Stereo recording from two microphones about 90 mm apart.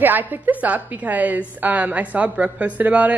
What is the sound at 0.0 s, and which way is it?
A woman's voice, 20° right (ahead or behind).